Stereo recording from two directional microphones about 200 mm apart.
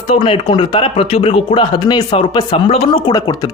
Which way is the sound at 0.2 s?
25° left (ahead or behind).